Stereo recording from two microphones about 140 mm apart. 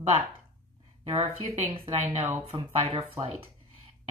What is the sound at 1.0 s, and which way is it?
Speech, 40° right (ahead or behind).